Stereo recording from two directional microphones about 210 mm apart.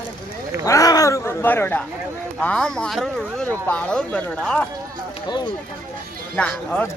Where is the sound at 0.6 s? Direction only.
15° left (ahead or behind).